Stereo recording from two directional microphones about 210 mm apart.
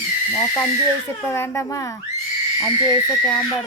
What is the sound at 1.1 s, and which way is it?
Speech, 10° left (ahead or behind).